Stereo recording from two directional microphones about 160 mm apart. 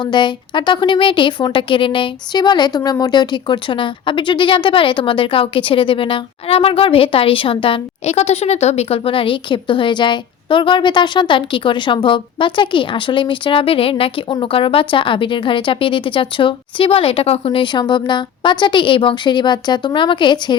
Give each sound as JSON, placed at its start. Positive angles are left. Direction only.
{"t": 0.0, "sound": "a woman's voice", "side_deg": 30}